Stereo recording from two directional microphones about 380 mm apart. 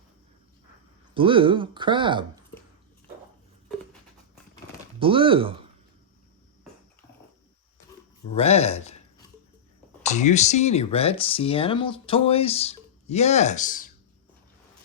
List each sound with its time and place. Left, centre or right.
1.1 s speech: centre
4.9 s speech: centre
8.4 s speech: centre
10.0 s speech: centre